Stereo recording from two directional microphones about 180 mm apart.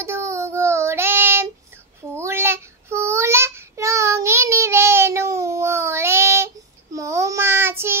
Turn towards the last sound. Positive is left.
turn(degrees=-15)  # may be behind; listen again after turning